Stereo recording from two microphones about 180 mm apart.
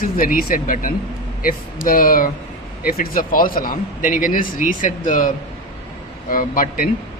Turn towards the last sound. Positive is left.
turn(degrees=50)  # may be behind; listen again after turning